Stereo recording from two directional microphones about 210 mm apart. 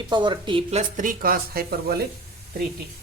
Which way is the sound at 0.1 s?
20° right (ahead or behind).